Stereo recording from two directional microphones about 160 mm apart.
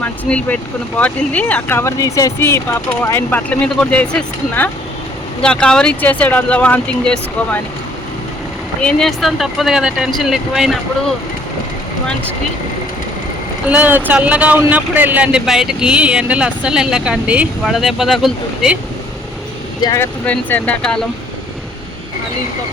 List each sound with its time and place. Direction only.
0.0 s speech: 10° left (ahead or behind)
8.8 s speech: 5° left (ahead or behind)
13.7 s speech: 10° right (ahead or behind)
19.8 s speech: 20° left (ahead or behind)
20.2 s speech: 10° left (ahead or behind)